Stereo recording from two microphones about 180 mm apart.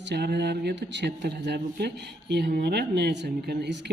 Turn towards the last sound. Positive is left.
turn(degrees=-70)  # may be behind; listen again after turning